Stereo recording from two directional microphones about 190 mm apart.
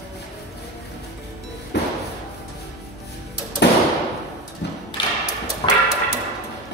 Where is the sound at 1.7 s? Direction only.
65° left (ahead or behind).